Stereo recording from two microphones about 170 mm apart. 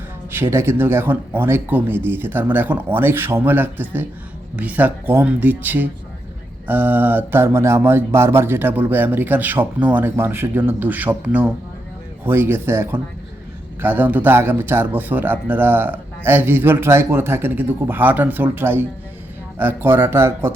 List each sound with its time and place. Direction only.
0.3 s speech: 15° right (ahead or behind)